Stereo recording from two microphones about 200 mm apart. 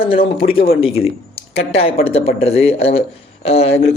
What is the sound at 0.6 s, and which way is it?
Speech, 30° left (ahead or behind).